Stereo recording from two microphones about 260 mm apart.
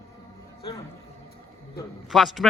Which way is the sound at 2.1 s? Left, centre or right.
Centre.